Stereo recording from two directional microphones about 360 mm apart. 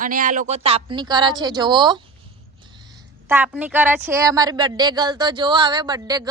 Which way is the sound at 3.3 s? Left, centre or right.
Centre.